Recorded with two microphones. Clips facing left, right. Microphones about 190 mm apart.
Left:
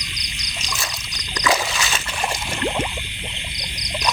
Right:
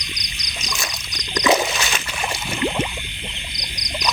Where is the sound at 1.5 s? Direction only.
20° right (ahead or behind).